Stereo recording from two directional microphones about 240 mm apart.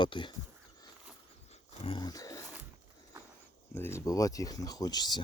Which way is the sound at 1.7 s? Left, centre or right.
Left.